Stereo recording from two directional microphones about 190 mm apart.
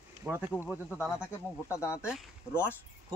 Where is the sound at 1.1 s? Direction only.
15° left (ahead or behind).